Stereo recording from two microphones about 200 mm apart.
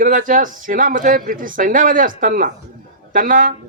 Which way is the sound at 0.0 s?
40° right (ahead or behind).